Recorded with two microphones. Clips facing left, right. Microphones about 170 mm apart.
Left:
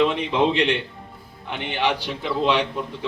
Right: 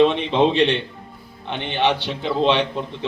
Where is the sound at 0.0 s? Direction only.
25° right (ahead or behind).